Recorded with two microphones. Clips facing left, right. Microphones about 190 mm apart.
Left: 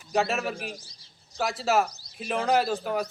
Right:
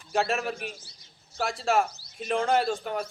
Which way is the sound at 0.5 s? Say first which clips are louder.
Left 1 dB; 35° left (ahead or behind).